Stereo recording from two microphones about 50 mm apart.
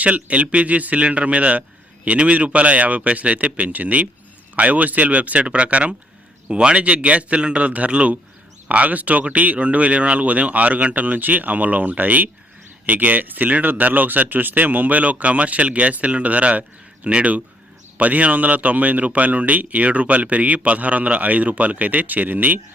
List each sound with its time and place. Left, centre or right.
0.0 s a man's voice: right